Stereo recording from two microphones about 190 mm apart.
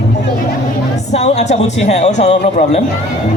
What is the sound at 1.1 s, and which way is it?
Speech, 35° left (ahead or behind).